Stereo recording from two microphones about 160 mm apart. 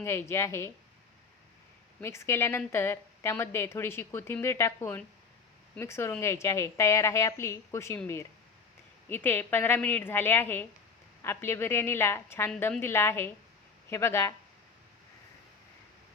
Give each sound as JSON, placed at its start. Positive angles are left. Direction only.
{"t": 0.0, "sound": "speech", "side_deg": 15}
{"t": 2.0, "sound": "speech", "side_deg": 15}